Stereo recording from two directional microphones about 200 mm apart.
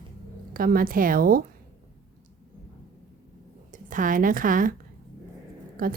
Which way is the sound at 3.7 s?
40° right (ahead or behind).